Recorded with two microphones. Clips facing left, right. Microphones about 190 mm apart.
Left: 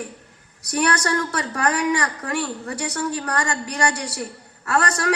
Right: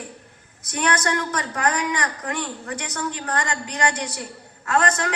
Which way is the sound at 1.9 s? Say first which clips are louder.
Left 4 dB; 20° right (ahead or behind).